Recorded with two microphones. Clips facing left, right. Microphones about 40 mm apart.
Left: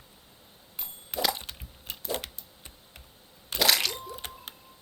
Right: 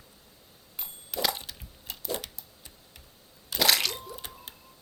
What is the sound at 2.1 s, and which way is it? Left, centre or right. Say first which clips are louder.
Typewriter: left 1 dB; left.